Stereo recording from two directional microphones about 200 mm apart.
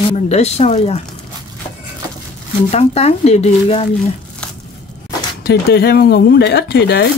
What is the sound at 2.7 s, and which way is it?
Speech, 30° left (ahead or behind).